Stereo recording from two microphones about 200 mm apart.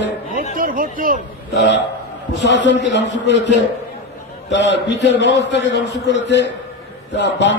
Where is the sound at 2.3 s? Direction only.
60° left (ahead or behind).